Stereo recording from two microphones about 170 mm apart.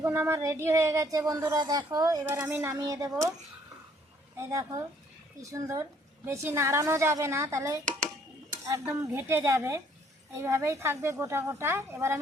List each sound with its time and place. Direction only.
0.0 s a woman's voice: 15° right (ahead or behind)
4.4 s a woman's voice: 15° right (ahead or behind)